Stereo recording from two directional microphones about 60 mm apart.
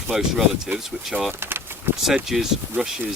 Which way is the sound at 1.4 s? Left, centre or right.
Right.